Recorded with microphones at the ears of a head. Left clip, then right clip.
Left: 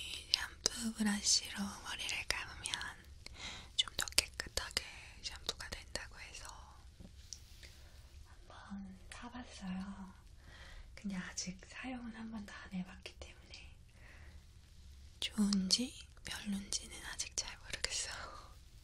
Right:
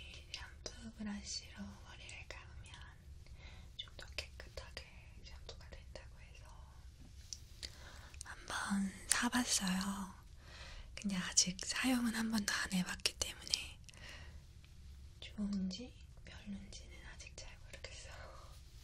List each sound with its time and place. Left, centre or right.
0.0 s whispering: left
7.6 s whispering: right
11.3 s speech: right
15.1 s whispering: left